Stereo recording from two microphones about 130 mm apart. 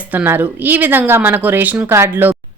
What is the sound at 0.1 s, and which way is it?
Speech, 15° right (ahead or behind).